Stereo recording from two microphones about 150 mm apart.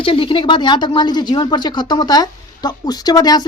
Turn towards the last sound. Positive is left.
turn(degrees=25)  # may be behind; listen again after turning